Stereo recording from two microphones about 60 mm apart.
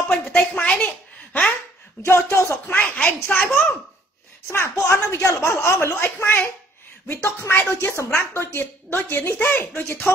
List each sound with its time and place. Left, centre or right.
0.1 s a sound: centre
2.0 s speech: left
2.6 s a woman's voice: left
4.5 s speech: left
4.7 s a woman's voice: left